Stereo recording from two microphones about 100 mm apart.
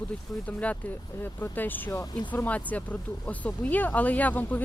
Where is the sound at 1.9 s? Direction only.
35° left (ahead or behind).